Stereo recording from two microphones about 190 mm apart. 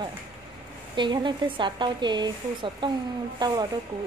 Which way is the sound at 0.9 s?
25° right (ahead or behind).